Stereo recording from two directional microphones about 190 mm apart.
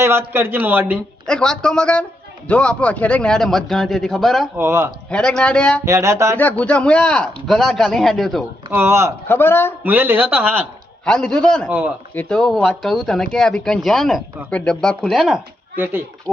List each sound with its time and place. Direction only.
0.0 s a man's voice: 15° right (ahead or behind)
1.3 s speech: 5° left (ahead or behind)
4.5 s a man's voice: 15° right (ahead or behind)
5.0 s speech: 5° left (ahead or behind)
5.8 s a man's voice: 15° right (ahead or behind)
6.3 s speech: 10° left (ahead or behind)
8.7 s a man's voice: 15° right (ahead or behind)
9.2 s a man's voice: 10° left (ahead or behind)
9.8 s a man's voice: 10° right (ahead or behind)
11.0 s speech: 5° left (ahead or behind)